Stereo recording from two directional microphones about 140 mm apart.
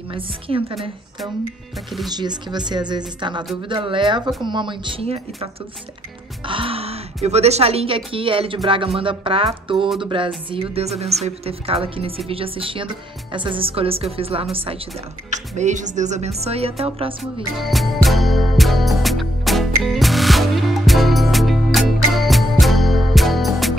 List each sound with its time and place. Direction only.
0.1 s speech: 40° right (ahead or behind)
2.0 s a woman's voice: 30° right (ahead or behind)
15.2 s speech: 55° right (ahead or behind)
17.2 s music: centre (ahead or behind)